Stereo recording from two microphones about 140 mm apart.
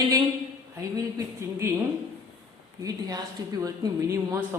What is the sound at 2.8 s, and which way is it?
Speech, 25° right (ahead or behind).